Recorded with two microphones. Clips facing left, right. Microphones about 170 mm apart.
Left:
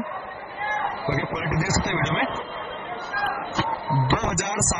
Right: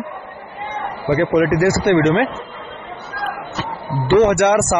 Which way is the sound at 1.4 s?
60° right (ahead or behind).